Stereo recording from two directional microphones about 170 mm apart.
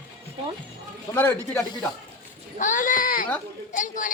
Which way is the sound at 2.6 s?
50° left (ahead or behind).